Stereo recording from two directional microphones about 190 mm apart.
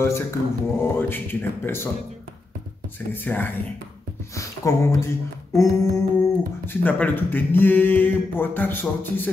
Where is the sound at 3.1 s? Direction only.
10° left (ahead or behind).